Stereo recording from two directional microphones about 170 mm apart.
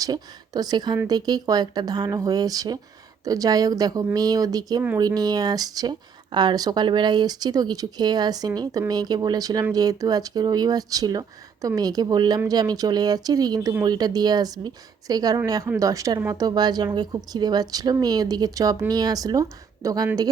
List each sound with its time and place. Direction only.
0.0 s speech: 20° right (ahead or behind)